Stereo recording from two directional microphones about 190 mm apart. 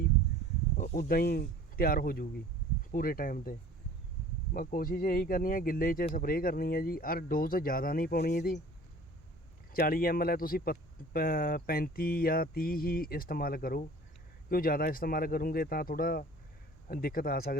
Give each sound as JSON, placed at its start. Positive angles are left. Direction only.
{"t": 0.8, "sound": "speech", "side_deg": 45}
{"t": 4.5, "sound": "speech", "side_deg": 50}
{"t": 9.7, "sound": "speech", "side_deg": 50}